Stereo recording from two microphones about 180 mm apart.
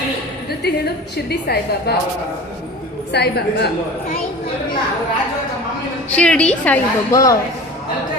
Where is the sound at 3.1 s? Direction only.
65° left (ahead or behind).